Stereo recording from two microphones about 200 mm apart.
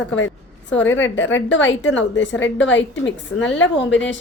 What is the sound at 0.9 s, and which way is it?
A woman's voice, 70° left (ahead or behind).